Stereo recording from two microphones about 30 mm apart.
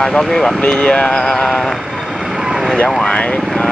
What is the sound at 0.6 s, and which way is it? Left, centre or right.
Speech, left.